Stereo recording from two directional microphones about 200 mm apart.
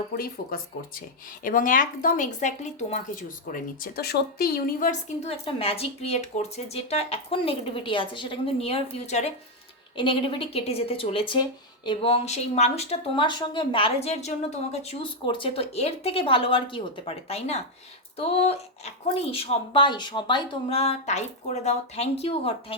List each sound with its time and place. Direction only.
0.1 s a woman's voice: 45° left (ahead or behind)
5.5 s speech: 30° left (ahead or behind)